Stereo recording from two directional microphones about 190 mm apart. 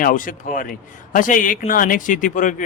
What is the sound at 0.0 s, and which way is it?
A man's voice, 45° left (ahead or behind).